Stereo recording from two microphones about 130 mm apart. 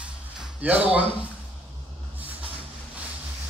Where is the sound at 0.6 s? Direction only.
10° right (ahead or behind).